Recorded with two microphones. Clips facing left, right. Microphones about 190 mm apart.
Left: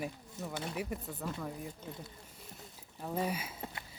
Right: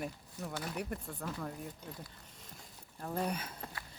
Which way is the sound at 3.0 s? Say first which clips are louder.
Left 1 dB; 5° left (ahead or behind).